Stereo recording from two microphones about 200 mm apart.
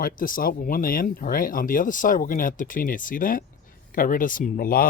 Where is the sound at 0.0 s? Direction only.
45° left (ahead or behind).